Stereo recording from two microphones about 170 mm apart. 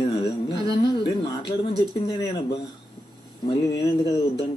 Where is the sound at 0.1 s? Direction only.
65° left (ahead or behind).